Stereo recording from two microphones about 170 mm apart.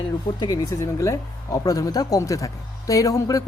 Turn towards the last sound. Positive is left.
turn(degrees=20)  # may be behind; listen again after turning